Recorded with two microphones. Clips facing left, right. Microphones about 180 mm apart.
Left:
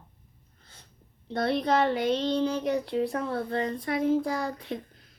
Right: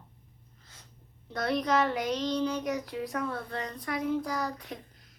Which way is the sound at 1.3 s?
30° left (ahead or behind).